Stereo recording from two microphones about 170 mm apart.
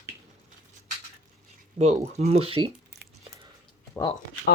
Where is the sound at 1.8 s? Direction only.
40° right (ahead or behind).